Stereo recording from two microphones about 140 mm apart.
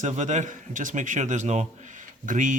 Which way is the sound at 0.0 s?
60° right (ahead or behind).